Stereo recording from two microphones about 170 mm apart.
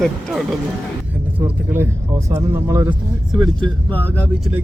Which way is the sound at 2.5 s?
15° right (ahead or behind).